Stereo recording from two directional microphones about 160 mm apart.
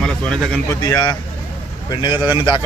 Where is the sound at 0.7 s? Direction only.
25° left (ahead or behind).